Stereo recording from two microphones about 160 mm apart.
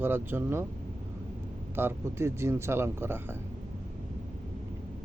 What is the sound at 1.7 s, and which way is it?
Speech, 15° right (ahead or behind).